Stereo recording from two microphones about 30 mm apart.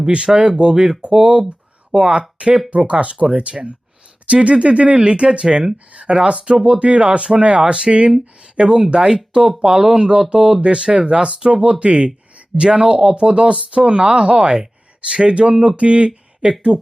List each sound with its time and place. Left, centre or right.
0.0 s speech: right
2.6 s speech: right
3.1 s speech: right
6.3 s speech: right
6.7 s speech: right
7.6 s speech: right
16.4 s speech: right